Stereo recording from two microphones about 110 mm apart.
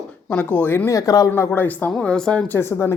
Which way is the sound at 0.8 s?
30° left (ahead or behind).